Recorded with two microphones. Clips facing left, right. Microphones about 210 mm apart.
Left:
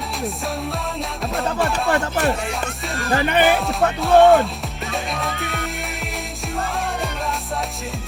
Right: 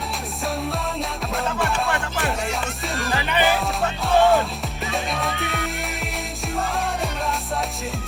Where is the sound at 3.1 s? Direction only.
50° left (ahead or behind).